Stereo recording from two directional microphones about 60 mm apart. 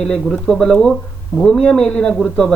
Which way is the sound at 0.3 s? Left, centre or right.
Centre.